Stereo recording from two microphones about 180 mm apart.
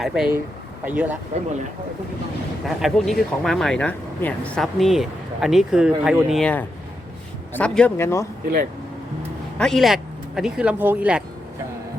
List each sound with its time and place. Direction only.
0.0 s speech: 5° right (ahead or behind)
1.3 s speech: 40° right (ahead or behind)
2.6 s speech: centre (ahead or behind); by 8.3 s 15° left (ahead or behind)
9.6 s speech: centre (ahead or behind)